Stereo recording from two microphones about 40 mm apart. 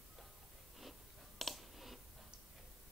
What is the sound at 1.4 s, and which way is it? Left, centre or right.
Clicking, centre.